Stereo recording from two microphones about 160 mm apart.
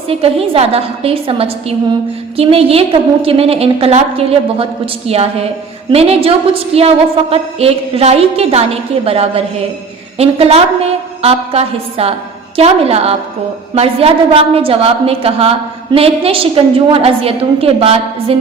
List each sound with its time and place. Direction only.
0.1 s a woman's voice: 40° right (ahead or behind)